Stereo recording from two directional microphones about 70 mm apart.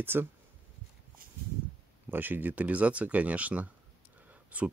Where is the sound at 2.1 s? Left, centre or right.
Right.